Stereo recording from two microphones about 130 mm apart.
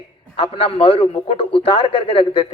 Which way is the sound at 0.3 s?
45° left (ahead or behind).